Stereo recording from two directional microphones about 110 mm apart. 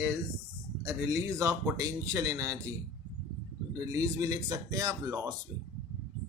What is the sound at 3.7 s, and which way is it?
A man's voice, 35° right (ahead or behind).